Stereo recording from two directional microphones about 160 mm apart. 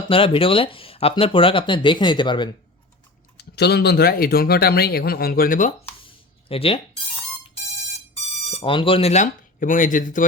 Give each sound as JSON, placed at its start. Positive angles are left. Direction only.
{"t": 0.1, "sound": "speech", "side_deg": 35}
{"t": 3.3, "sound": "speech", "side_deg": 90}
{"t": 6.5, "sound": "speech", "side_deg": 35}
{"t": 8.4, "sound": "speech", "side_deg": 35}